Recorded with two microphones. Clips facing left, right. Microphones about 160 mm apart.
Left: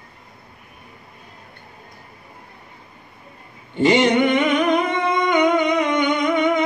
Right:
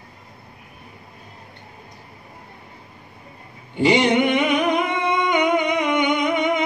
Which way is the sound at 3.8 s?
10° right (ahead or behind).